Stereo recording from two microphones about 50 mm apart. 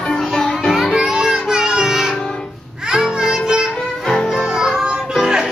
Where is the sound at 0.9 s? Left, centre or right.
Centre.